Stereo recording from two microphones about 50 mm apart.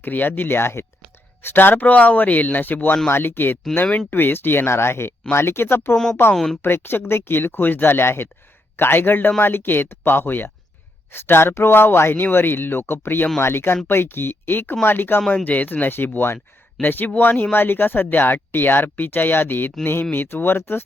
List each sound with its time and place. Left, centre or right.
0.0 s speech: left
1.5 s speech: left
3.1 s speech: left
6.3 s speech: centre
6.6 s speech: left